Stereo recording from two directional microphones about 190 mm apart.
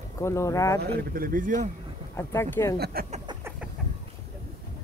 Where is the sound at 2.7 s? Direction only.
55° right (ahead or behind).